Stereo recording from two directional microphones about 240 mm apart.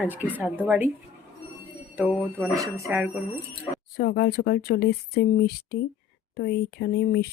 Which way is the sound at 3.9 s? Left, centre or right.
Left.